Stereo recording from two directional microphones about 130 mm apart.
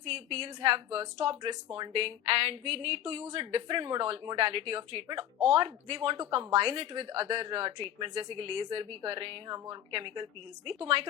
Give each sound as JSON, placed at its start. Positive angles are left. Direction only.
{"t": 0.0, "sound": "speech", "side_deg": -50}